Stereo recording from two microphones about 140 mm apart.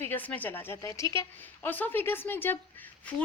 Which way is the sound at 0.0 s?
15° left (ahead or behind).